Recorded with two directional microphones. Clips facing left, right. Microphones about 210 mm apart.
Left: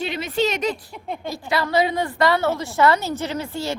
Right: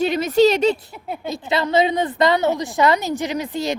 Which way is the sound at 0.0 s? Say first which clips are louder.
Right 8 dB; 40° right (ahead or behind).